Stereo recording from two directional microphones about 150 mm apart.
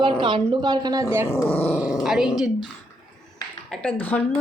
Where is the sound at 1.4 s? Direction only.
10° left (ahead or behind).